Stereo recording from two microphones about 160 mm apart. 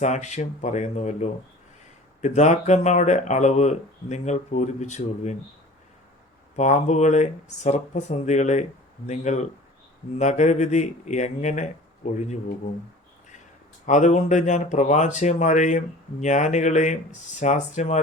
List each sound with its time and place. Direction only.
0.0 s speech: 45° left (ahead or behind)
6.6 s speech: 45° left (ahead or behind)
13.8 s speech: 50° left (ahead or behind)